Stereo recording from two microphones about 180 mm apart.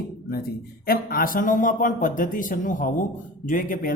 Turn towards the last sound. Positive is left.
turn(degrees=50)  # may be behind; listen again after turning